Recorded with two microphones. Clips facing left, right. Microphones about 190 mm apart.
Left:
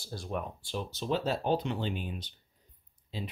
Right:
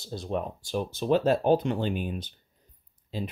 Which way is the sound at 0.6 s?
55° right (ahead or behind).